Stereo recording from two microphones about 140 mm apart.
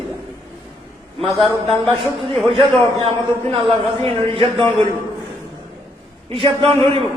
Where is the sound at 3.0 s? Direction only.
45° right (ahead or behind).